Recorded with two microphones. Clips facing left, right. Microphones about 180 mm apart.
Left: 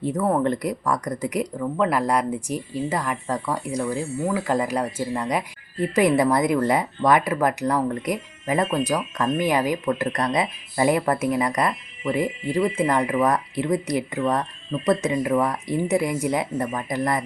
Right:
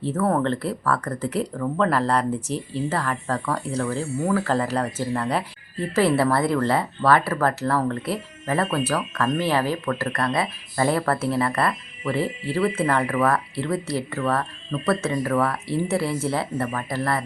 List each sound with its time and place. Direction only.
0.0 s speech: 15° left (ahead or behind)